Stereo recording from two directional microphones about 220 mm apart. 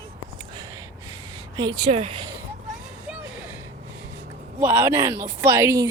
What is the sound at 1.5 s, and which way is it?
Speech, 20° right (ahead or behind).